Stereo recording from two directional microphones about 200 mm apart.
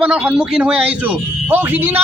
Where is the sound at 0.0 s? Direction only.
5° right (ahead or behind).